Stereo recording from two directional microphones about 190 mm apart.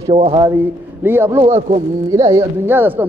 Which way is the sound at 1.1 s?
10° right (ahead or behind).